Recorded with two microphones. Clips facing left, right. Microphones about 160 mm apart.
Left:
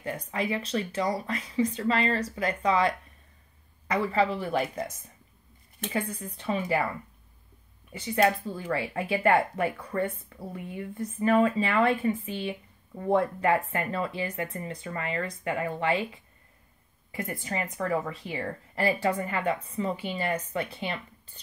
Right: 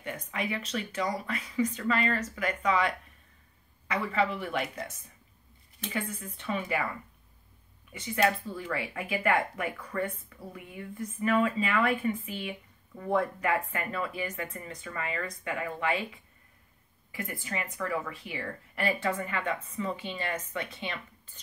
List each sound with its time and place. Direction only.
0.0 s speech: 35° left (ahead or behind)
5.9 s speech: 35° left (ahead or behind)
7.9 s speech: 35° left (ahead or behind)
17.2 s speech: 35° left (ahead or behind)